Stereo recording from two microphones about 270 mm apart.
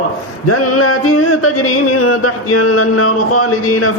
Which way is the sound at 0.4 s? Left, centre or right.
Left.